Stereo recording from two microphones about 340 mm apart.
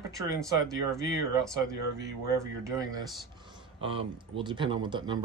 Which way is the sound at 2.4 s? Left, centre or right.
Centre.